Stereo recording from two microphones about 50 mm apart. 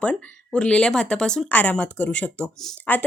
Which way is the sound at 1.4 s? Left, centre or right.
Left.